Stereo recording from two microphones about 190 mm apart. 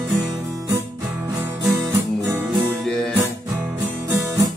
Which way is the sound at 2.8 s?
5° left (ahead or behind).